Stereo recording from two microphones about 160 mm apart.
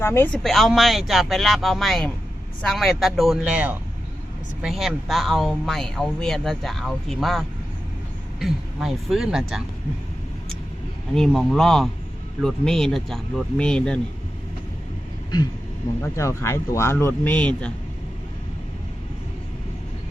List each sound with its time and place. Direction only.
0.0 s speech: 15° left (ahead or behind)
0.3 s speech: centre (ahead or behind)
11.1 s speech: centre (ahead or behind)
16.0 s speech: 15° left (ahead or behind)